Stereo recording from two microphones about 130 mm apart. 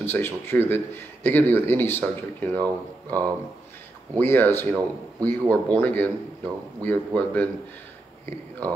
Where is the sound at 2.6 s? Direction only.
30° right (ahead or behind).